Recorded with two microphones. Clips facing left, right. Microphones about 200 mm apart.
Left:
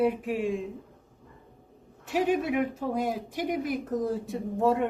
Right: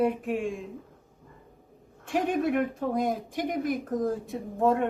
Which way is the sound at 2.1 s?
5° left (ahead or behind).